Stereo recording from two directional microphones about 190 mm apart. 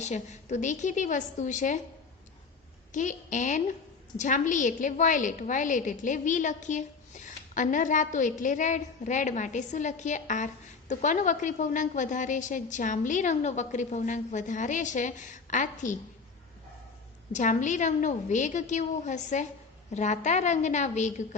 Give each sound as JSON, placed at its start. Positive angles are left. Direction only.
{"t": 0.0, "sound": "a woman's voice", "side_deg": 40}
{"t": 2.9, "sound": "a woman's voice", "side_deg": 40}
{"t": 17.3, "sound": "a woman's voice", "side_deg": 40}